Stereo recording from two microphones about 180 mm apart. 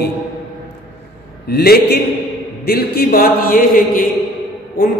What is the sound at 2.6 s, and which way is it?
Mantra, 60° left (ahead or behind).